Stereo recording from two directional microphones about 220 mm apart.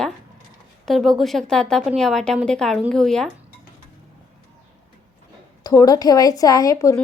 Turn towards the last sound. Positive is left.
turn(degrees=15)  # may be behind; listen again after turning